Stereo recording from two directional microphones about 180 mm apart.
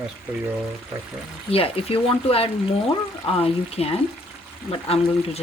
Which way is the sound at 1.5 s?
30° left (ahead or behind).